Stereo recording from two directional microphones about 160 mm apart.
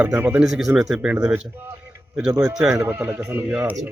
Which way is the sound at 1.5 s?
15° right (ahead or behind).